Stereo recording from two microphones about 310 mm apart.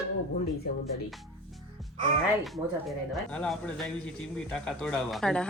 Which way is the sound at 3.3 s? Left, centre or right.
Centre.